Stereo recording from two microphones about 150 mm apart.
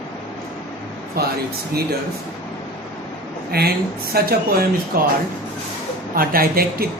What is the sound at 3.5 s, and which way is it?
Speech, 90° right.